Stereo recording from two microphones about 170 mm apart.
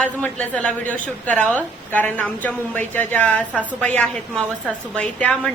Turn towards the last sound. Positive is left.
turn(degrees=5)  # may be behind; listen again after turning